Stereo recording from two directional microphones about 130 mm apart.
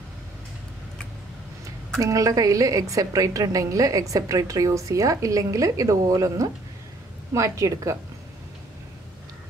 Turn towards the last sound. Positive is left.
turn(degrees=-25)  # may be behind; listen again after turning